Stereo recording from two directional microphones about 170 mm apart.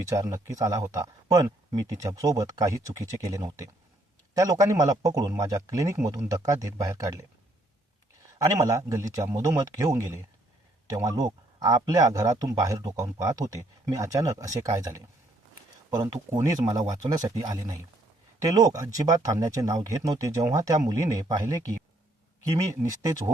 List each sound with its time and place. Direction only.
0.1 s speech: 20° right (ahead or behind)
8.4 s speech: 20° right (ahead or behind)
16.0 s speech: 20° right (ahead or behind)